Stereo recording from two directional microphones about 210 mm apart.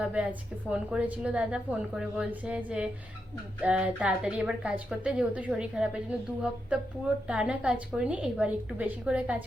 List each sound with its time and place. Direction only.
0.0 s a woman's voice: 5° right (ahead or behind)